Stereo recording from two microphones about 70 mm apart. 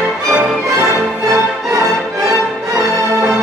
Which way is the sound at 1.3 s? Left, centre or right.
Right.